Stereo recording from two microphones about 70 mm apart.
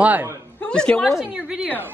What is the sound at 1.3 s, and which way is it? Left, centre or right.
Speech, centre.